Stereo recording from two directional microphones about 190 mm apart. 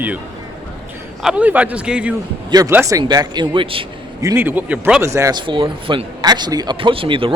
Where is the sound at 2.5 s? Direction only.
15° right (ahead or behind).